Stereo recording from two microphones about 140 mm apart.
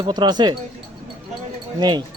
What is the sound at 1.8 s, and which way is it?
Speech, 30° right (ahead or behind).